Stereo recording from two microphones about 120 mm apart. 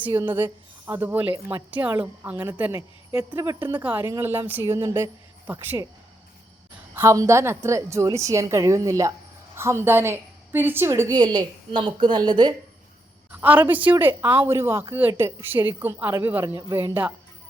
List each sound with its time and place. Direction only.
0.1 s a woman's voice: 20° right (ahead or behind)
2.7 s a woman's voice: 25° right (ahead or behind)
3.6 s a woman's voice: 15° right (ahead or behind)
6.9 s a woman's voice: 25° right (ahead or behind)
13.4 s a woman's voice: 15° right (ahead or behind)